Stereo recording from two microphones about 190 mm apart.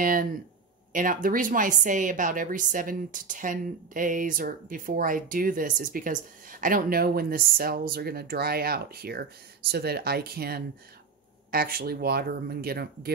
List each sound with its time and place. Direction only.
0.0 s a woman's voice: 45° right (ahead or behind)